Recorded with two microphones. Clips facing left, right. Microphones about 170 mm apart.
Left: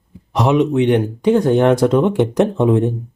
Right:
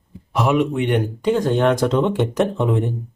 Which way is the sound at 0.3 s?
20° left (ahead or behind).